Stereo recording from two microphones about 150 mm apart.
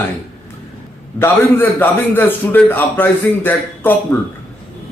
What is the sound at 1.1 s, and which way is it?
A man's voice, 15° left (ahead or behind).